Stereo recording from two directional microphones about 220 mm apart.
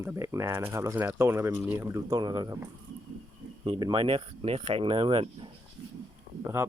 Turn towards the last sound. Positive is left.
turn(degrees=-10)  # may be behind; listen again after turning